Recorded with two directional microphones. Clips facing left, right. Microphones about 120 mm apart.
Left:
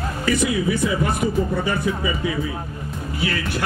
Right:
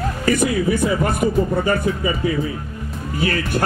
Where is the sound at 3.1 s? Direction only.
45° right (ahead or behind).